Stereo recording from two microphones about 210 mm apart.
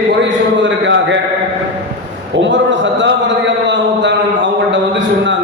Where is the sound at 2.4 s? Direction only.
60° right (ahead or behind).